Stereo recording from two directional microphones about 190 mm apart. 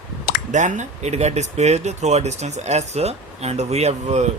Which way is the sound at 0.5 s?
40° right (ahead or behind).